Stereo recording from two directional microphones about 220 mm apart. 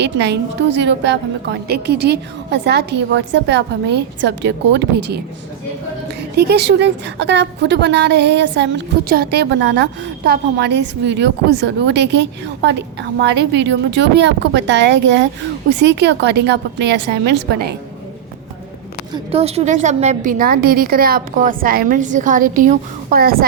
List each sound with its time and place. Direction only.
0.0 s a woman's voice: 50° right (ahead or behind)
6.3 s a woman's voice: 50° right (ahead or behind)
19.1 s a woman's voice: 25° right (ahead or behind)